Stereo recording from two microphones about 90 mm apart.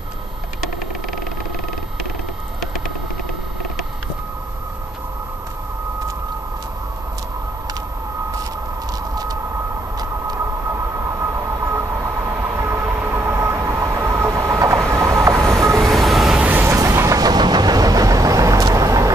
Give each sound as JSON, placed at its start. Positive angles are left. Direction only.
{"t": 9.1, "sound": "vehicle", "side_deg": -45}
{"t": 10.7, "sound": "train", "side_deg": -35}
{"t": 15.8, "sound": "train", "side_deg": 0}
{"t": 16.3, "sound": "a sound", "side_deg": -20}
{"t": 16.8, "sound": "vehicle", "side_deg": -30}